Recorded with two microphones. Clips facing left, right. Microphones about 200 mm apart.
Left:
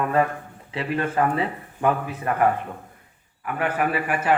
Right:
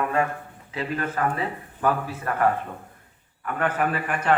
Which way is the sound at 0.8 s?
30° left (ahead or behind).